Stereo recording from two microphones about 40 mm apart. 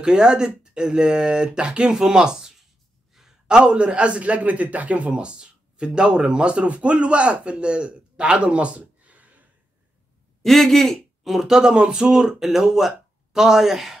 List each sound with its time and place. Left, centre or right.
0.0 s a man's voice: centre
3.1 s a sound: centre
3.4 s a man's voice: right
10.4 s speech: centre
11.2 s a man's voice: centre